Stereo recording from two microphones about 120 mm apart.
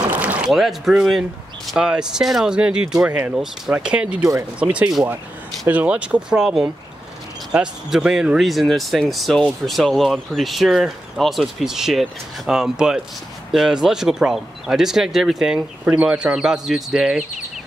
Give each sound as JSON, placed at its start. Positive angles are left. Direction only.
{"t": 0.1, "sound": "a sound", "side_deg": -10}
{"t": 0.5, "sound": "speech", "side_deg": 0}
{"t": 4.2, "sound": "speech", "side_deg": -25}
{"t": 4.6, "sound": "speech", "side_deg": -10}